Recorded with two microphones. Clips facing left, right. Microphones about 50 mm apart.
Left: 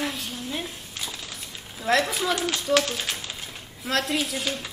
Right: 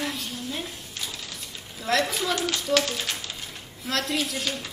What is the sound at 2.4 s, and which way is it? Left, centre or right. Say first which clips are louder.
A child's voice: left 1 dB; centre.